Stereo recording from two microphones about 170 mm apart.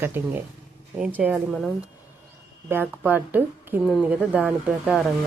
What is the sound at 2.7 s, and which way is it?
A woman's voice, 10° right (ahead or behind).